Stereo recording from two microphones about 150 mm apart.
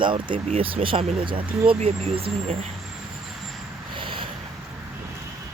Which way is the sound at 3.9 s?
35° right (ahead or behind).